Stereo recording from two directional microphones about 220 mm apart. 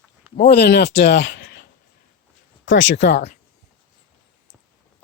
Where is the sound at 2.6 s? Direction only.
60° left (ahead or behind).